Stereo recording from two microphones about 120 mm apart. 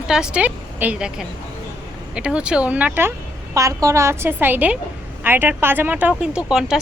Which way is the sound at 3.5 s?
25° right (ahead or behind).